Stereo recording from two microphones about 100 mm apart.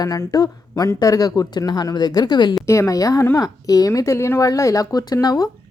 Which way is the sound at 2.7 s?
30° left (ahead or behind).